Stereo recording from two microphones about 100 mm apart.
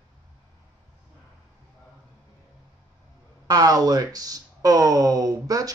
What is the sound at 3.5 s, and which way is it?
A man's voice, 40° right (ahead or behind).